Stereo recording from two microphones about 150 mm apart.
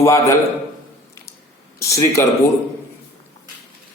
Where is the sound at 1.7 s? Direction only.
20° left (ahead or behind).